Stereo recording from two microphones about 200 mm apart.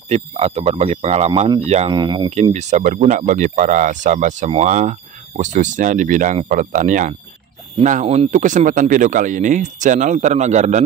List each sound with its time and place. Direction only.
0.1 s speech: 30° right (ahead or behind)